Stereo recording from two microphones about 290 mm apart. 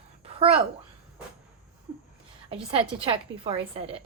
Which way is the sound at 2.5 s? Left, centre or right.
Centre.